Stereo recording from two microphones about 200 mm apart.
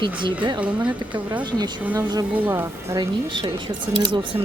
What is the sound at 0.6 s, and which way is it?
Speech, 5° right (ahead or behind).